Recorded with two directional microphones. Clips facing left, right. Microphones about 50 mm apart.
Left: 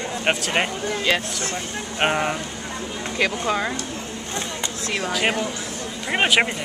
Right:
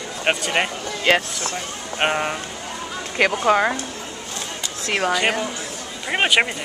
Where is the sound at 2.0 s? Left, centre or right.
Centre.